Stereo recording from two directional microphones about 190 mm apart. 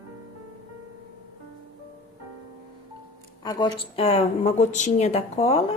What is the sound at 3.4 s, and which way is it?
A woman's voice, 20° left (ahead or behind).